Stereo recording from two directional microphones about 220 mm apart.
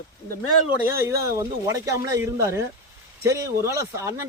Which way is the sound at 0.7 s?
10° right (ahead or behind).